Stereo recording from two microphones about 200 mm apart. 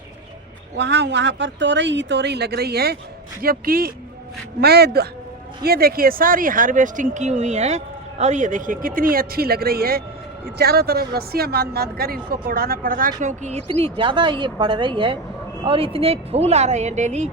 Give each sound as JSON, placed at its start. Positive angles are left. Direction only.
{"t": 0.8, "sound": "speech", "side_deg": -60}